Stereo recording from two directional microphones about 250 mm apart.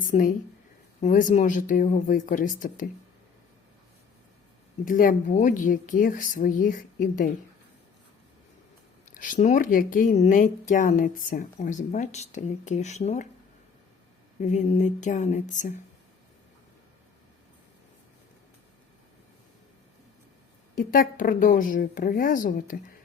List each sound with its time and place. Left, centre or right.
0.0 s speech: left
4.9 s speech: left
9.1 s speech: left
14.4 s a sound: left
20.7 s speech: left